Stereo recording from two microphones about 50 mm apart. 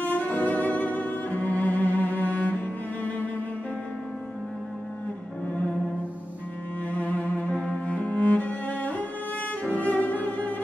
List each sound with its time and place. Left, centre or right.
0.0 s music: left
7.0 s cello: left